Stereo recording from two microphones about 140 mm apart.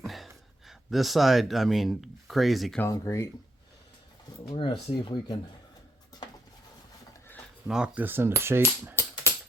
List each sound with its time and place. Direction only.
0.0 s a sound: centre (ahead or behind)
0.7 s speech: centre (ahead or behind)
2.7 s speech: 20° left (ahead or behind)
4.5 s speech: 35° left (ahead or behind)
6.1 s a sound: 30° left (ahead or behind)
7.7 s typewriter: 10° right (ahead or behind)